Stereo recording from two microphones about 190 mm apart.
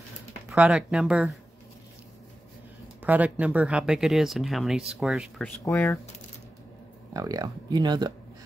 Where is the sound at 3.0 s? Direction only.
10° right (ahead or behind).